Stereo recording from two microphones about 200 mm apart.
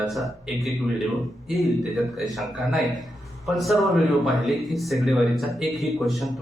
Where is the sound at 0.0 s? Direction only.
Centre (ahead or behind).